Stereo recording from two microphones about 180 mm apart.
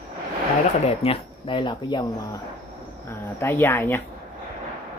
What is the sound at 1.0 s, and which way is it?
Speech, 30° left (ahead or behind).